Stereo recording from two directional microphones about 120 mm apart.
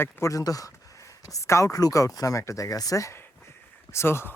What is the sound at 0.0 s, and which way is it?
Speech, 25° left (ahead or behind).